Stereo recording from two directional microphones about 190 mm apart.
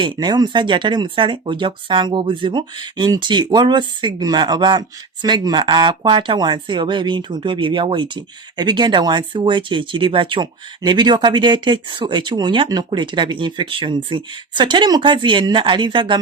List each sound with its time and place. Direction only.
0.0 s speech: 20° right (ahead or behind)